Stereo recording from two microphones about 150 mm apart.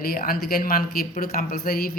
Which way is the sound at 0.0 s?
80° left.